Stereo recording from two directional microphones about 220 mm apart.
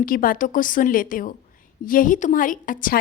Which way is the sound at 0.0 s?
40° left (ahead or behind).